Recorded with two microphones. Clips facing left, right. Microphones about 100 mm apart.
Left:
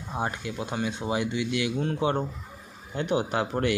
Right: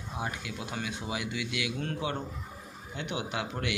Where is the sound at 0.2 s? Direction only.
35° left (ahead or behind).